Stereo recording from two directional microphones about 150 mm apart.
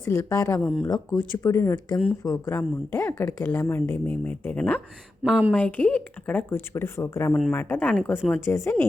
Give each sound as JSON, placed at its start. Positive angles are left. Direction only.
{"t": 0.0, "sound": "speech", "side_deg": 15}
{"t": 1.4, "sound": "speech", "side_deg": 20}
{"t": 2.0, "sound": "speech", "side_deg": -5}
{"t": 2.5, "sound": "speech", "side_deg": 15}
{"t": 5.2, "sound": "speech", "side_deg": -5}
{"t": 5.5, "sound": "speech", "side_deg": 10}